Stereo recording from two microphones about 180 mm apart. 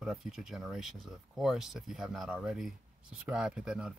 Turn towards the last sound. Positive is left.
turn(degrees=-5)  # may be behind; listen again after turning